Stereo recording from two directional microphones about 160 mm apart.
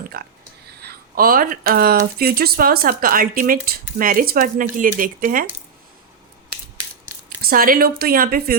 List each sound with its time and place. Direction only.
0.1 s speech: 70° right (ahead or behind)
7.3 s speech: 65° right (ahead or behind)